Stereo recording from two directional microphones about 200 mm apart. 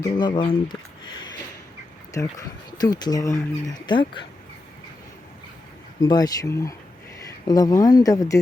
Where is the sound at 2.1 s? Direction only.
15° left (ahead or behind).